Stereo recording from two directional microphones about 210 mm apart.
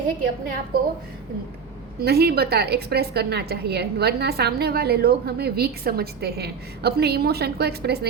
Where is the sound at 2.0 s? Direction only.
50° right (ahead or behind).